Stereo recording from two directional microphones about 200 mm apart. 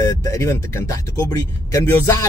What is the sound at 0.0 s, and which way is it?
Speech, 15° left (ahead or behind).